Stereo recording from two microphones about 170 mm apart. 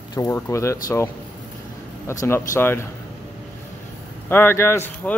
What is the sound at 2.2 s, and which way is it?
Speech, 15° left (ahead or behind).